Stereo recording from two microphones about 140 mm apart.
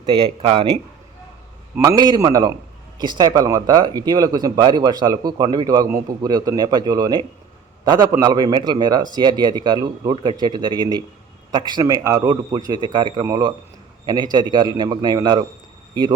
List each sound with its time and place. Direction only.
0.0 s speech: 40° right (ahead or behind)
1.8 s a man's voice: 25° right (ahead or behind)